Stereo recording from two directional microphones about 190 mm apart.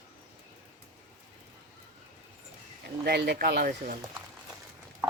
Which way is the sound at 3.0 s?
60° right (ahead or behind).